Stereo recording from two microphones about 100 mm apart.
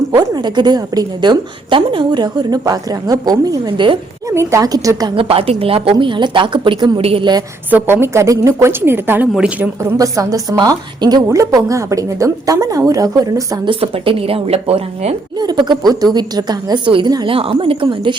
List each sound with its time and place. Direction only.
0.3 s a woman's voice: 45° right (ahead or behind)
4.3 s a woman's voice: 30° right (ahead or behind)
5.1 s a woman's voice: 70° right (ahead or behind); by 7.0 s 50° right (ahead or behind)
7.0 s a woman's voice: 75° right (ahead or behind)
7.7 s a woman's voice: 20° right (ahead or behind)
10.0 s a woman's voice: 35° right (ahead or behind)
13.7 s a woman's voice: 65° right (ahead or behind); by 15.1 s 90° right
15.4 s a woman's voice: 45° right (ahead or behind)
17.2 s a woman's voice: 70° right (ahead or behind)